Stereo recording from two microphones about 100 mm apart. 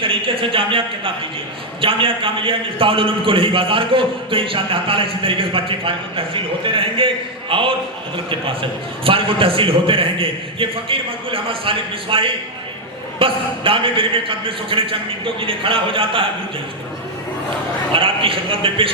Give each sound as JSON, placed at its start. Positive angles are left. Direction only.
{"t": 0.0, "sound": "a man's voice", "side_deg": -60}
{"t": 9.0, "sound": "a man's voice", "side_deg": -65}
{"t": 17.9, "sound": "a man's voice", "side_deg": -60}